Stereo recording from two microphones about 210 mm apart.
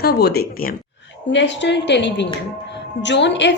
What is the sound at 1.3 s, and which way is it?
A woman's voice, 55° left (ahead or behind).